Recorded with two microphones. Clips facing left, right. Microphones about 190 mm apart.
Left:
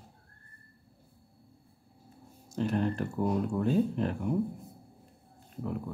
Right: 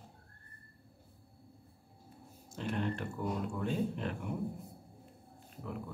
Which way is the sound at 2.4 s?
40° left (ahead or behind).